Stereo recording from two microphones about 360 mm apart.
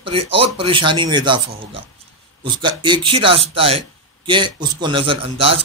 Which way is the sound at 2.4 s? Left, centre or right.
Centre.